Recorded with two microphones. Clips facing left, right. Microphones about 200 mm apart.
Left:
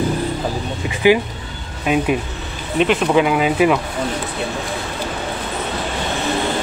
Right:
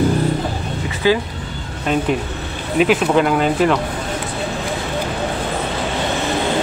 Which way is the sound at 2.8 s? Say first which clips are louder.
Even; centre (ahead or behind).